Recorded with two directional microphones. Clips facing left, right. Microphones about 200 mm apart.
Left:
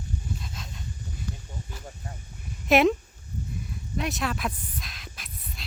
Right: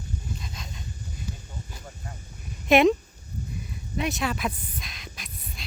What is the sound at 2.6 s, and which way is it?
Speech, centre (ahead or behind).